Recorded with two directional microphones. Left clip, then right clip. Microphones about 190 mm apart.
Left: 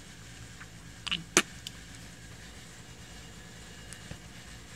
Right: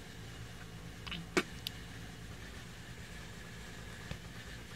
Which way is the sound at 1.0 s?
25° left (ahead or behind).